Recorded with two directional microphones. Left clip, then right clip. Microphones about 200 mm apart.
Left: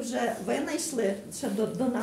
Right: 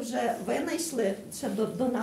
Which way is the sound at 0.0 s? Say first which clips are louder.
Even; 5° right (ahead or behind).